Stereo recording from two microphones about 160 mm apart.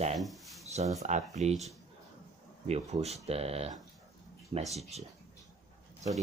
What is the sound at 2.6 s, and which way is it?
Speech, 40° right (ahead or behind).